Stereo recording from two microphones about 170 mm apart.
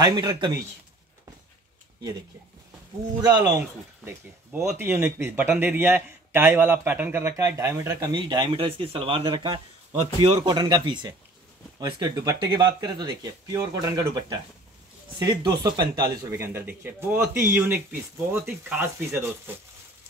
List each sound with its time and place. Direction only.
0.0 s speech: 25° right (ahead or behind)
3.2 s speech: 25° right (ahead or behind)
15.1 s speech: 25° right (ahead or behind)